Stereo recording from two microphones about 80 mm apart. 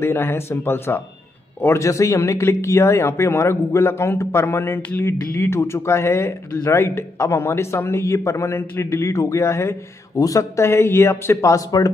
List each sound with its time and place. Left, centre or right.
0.0 s speech: left